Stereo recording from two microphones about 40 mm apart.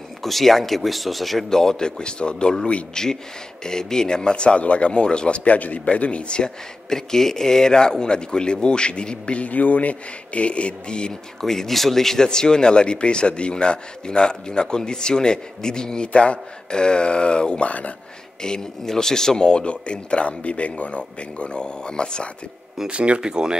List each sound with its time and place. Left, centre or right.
0.2 s speech: centre
1.5 s a man's voice: centre
11.4 s a man's voice: centre; by 17.6 s left
17.6 s speech: left
18.4 s a man's voice: centre
22.8 s speech: right
23.2 s speech: centre